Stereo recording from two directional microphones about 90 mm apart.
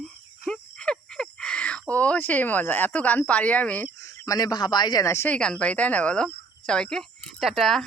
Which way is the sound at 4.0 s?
40° left (ahead or behind).